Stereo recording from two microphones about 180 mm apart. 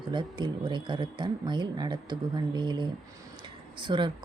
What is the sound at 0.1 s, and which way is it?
Speech, 25° right (ahead or behind).